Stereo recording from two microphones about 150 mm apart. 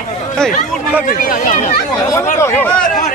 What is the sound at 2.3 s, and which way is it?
Speech, 20° left (ahead or behind).